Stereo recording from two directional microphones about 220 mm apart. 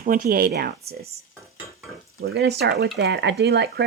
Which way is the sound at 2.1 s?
45° right (ahead or behind).